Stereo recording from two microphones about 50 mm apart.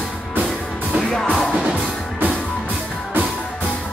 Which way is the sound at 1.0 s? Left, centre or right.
Centre.